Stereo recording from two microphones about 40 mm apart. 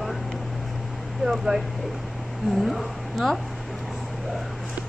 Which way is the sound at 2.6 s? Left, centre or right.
Centre.